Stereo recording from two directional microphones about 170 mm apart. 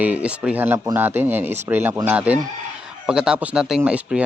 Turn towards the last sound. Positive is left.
turn(degrees=-10)  # may be behind; listen again after turning